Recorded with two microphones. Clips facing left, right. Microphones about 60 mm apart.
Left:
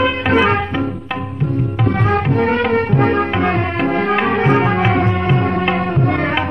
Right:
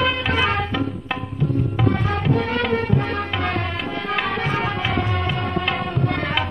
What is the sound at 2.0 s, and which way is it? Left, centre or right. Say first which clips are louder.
Music: left 6 dB; left.